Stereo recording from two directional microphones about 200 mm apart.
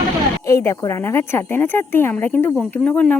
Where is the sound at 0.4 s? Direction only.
15° left (ahead or behind).